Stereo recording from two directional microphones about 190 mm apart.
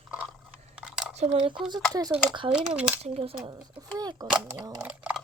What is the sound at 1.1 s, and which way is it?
Speech, 30° right (ahead or behind).